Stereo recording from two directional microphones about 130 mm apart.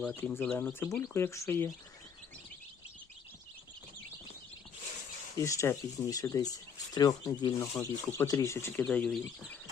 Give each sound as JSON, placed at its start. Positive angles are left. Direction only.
{"t": 0.3, "sound": "speech", "side_deg": 10}
{"t": 5.4, "sound": "speech", "side_deg": 20}
{"t": 8.8, "sound": "speech", "side_deg": 5}